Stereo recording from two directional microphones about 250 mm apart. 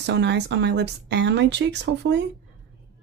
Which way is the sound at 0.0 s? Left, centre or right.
Right.